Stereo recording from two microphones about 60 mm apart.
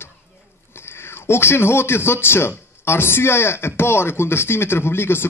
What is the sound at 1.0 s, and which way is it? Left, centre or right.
Speech, left.